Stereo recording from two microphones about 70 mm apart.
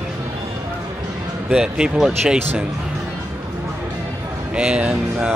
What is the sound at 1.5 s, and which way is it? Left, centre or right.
Speech, centre.